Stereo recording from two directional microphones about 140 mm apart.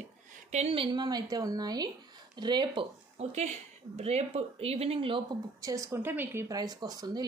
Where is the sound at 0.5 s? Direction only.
50° right (ahead or behind).